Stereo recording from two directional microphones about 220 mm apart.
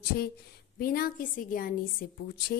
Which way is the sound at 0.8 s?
40° left (ahead or behind).